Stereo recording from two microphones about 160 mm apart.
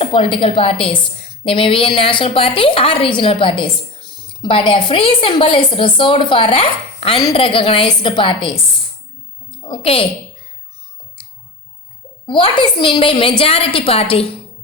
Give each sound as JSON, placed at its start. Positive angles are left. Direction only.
{"t": 0.0, "sound": "a woman's voice", "side_deg": 30}
{"t": 9.6, "sound": "a woman's voice", "side_deg": 30}
{"t": 12.2, "sound": "a woman's voice", "side_deg": 30}